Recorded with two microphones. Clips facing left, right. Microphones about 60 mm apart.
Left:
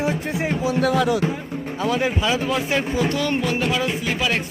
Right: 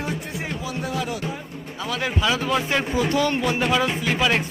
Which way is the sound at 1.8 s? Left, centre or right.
Left.